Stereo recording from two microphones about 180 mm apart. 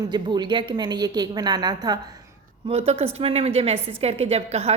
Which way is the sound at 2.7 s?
35° right (ahead or behind).